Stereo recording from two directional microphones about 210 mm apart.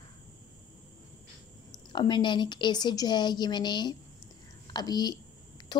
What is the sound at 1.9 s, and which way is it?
A woman's voice, 20° left (ahead or behind).